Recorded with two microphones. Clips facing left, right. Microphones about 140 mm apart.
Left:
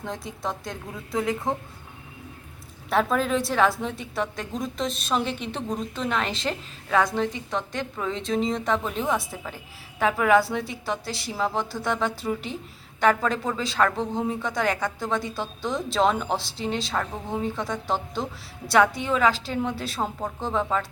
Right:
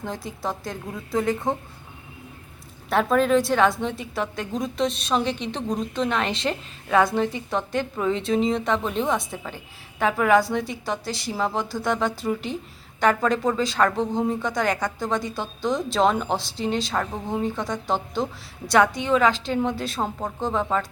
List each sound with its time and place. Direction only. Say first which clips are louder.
0.0 s a woman's voice: right 2 dB; centre (ahead or behind)
2.9 s a woman's voice: right 4 dB; centre (ahead or behind)